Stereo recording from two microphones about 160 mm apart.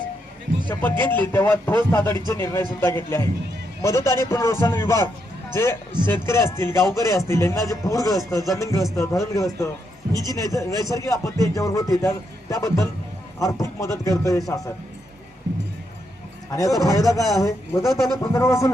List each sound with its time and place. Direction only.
0.7 s speech: 10° left (ahead or behind)
6.1 s a man's voice: 15° left (ahead or behind)
16.5 s a man's voice: 20° left (ahead or behind)
17.8 s a man's voice: centre (ahead or behind)
18.2 s speech: 15° left (ahead or behind)